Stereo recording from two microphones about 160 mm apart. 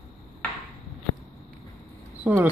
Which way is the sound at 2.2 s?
10° right (ahead or behind).